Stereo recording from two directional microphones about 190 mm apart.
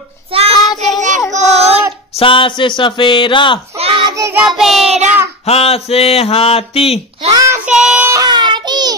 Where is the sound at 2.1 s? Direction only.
25° left (ahead or behind).